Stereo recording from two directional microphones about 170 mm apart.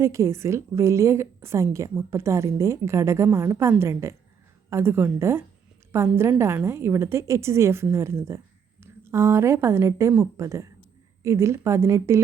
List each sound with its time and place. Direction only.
0.0 s a woman's voice: 15° right (ahead or behind)